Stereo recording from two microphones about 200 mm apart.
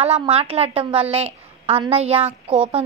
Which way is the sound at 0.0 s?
30° right (ahead or behind).